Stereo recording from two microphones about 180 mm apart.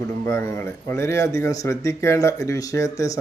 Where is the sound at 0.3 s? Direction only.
15° left (ahead or behind).